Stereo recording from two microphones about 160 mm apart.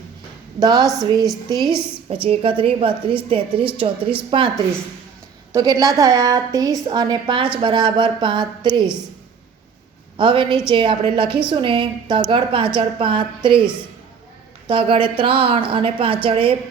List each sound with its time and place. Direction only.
0.6 s a woman's voice: 25° right (ahead or behind)
1.5 s a woman's voice: centre (ahead or behind)
2.0 s a woman's voice: 35° right (ahead or behind)
10.2 s a woman's voice: 30° right (ahead or behind)
14.7 s a woman's voice: 35° right (ahead or behind)